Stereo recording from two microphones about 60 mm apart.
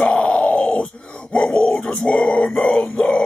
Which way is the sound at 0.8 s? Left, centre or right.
Centre.